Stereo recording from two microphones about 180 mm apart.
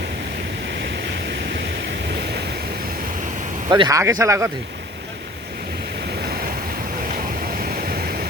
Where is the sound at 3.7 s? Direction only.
20° right (ahead or behind).